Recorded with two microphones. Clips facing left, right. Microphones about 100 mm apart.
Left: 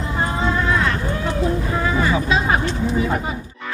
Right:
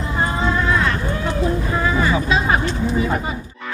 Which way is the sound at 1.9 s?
10° right (ahead or behind).